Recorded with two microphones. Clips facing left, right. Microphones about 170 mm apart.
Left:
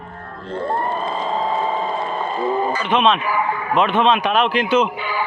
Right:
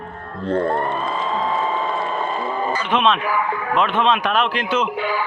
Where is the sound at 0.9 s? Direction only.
35° left (ahead or behind).